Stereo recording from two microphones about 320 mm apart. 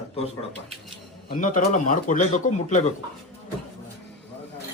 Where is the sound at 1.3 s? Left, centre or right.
Left.